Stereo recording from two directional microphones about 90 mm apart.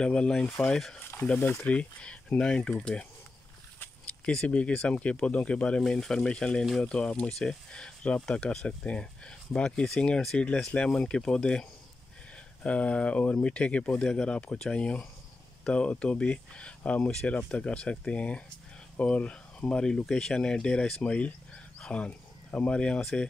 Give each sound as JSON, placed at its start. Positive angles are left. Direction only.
{"t": 0.0, "sound": "speech", "side_deg": 10}
{"t": 1.1, "sound": "speech", "side_deg": 15}
{"t": 4.3, "sound": "speech", "side_deg": 10}
{"t": 12.6, "sound": "speech", "side_deg": 15}